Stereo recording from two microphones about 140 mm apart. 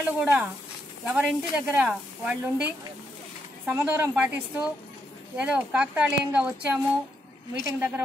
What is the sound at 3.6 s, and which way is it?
Speech, 15° right (ahead or behind).